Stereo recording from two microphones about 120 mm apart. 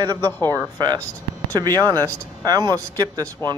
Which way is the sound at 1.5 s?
30° right (ahead or behind).